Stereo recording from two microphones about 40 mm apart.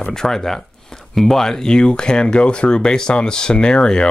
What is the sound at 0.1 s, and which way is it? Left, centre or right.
Speech, centre.